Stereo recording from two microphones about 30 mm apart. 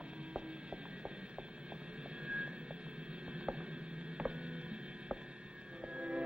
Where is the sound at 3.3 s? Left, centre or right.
Right.